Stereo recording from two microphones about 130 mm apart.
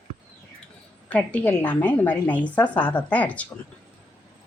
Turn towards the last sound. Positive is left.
turn(degrees=10)  # may be behind; listen again after turning